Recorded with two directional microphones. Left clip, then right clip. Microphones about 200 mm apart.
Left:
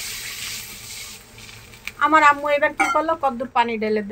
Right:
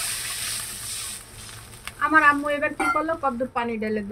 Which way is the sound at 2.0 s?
35° left (ahead or behind).